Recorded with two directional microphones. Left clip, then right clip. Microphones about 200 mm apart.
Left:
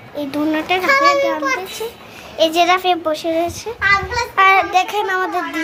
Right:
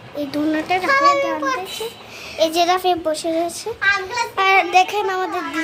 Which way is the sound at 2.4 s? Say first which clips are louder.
Left 3 dB; 5° right (ahead or behind).